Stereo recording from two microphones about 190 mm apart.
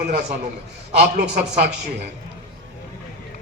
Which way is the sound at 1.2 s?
60° right (ahead or behind).